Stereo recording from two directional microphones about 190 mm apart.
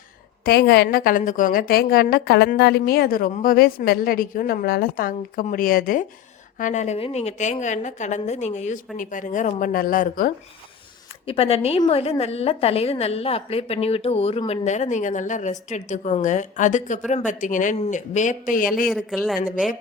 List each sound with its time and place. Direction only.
0.4 s a woman's voice: 55° left (ahead or behind)
11.3 s a woman's voice: 30° left (ahead or behind)
18.9 s speech: centre (ahead or behind)